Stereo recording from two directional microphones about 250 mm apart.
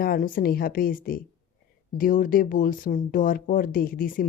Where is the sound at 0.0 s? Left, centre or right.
Left.